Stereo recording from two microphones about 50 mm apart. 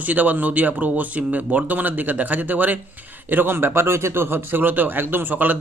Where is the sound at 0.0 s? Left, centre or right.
Right.